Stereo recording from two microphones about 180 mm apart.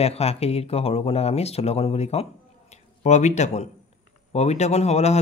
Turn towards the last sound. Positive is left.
turn(degrees=35)  # may be behind; listen again after turning